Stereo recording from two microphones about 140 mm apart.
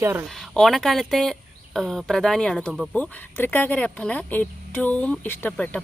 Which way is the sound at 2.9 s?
15° left (ahead or behind).